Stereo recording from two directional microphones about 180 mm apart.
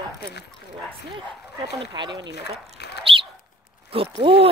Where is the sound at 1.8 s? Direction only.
25° right (ahead or behind).